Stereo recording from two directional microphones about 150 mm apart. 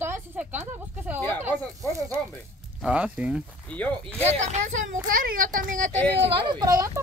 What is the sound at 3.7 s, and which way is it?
Speech, 5° left (ahead or behind).